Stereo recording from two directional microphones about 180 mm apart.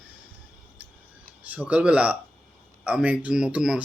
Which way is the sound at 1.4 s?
10° right (ahead or behind).